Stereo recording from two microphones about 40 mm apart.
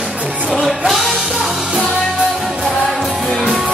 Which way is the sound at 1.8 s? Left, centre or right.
Centre.